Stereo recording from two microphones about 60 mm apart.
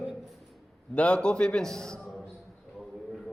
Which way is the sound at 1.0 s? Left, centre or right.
Centre.